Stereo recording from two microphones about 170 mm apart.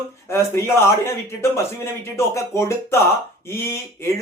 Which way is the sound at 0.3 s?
15° left (ahead or behind).